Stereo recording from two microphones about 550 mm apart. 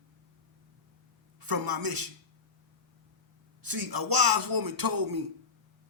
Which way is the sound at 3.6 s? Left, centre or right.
Right.